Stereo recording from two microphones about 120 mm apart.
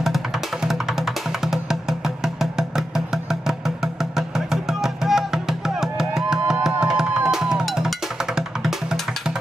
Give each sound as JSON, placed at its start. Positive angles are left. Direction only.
{"t": 0.0, "sound": "music", "side_deg": -5}